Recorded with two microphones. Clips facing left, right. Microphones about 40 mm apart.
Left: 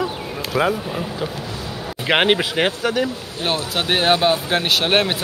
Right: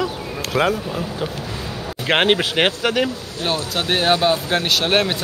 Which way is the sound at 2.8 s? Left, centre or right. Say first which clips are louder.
Right 1 dB; right.